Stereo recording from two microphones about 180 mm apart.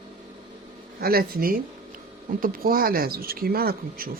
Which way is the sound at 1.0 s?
55° right (ahead or behind).